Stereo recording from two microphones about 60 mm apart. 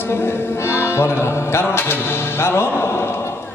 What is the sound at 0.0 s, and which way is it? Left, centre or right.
Music, left.